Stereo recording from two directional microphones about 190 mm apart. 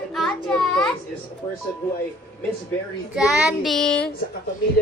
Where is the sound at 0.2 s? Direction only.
Centre (ahead or behind).